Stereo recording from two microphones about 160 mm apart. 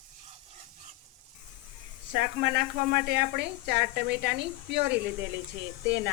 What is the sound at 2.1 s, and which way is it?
Speech, 90° right.